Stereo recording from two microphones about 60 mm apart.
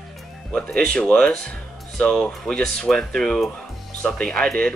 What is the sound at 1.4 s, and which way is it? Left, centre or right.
Music, centre.